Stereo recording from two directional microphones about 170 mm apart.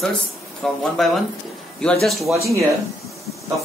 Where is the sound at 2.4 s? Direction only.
20° right (ahead or behind).